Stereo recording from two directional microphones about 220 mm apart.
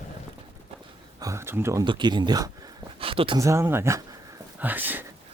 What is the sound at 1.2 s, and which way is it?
Speech, 15° right (ahead or behind).